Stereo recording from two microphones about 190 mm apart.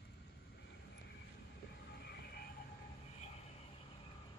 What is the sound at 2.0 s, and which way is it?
Vehicle, 55° left (ahead or behind).